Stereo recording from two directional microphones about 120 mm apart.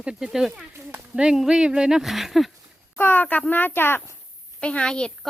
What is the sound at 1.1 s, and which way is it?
Speech, 5° right (ahead or behind).